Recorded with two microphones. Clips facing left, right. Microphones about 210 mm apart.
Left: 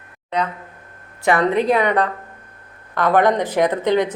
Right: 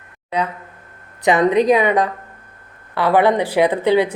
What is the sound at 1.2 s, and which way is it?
A woman's voice, 20° right (ahead or behind).